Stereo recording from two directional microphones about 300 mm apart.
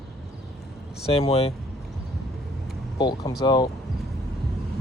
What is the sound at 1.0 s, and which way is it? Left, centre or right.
Speech, centre.